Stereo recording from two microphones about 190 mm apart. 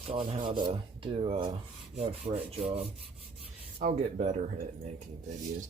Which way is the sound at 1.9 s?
30° right (ahead or behind).